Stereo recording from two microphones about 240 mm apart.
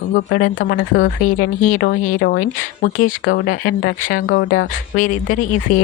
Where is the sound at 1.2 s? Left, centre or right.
Left.